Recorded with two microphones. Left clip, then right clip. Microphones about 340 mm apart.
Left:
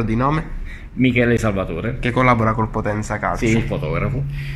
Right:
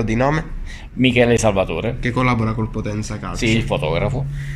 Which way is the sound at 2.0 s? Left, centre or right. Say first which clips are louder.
Left 6 dB; centre.